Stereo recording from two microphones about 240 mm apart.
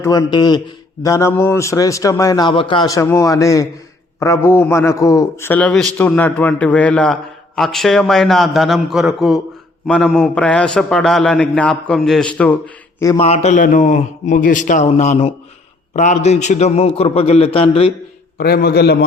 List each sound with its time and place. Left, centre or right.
0.0 s a man's voice: centre
13.2 s a man's voice: left
18.3 s a man's voice: left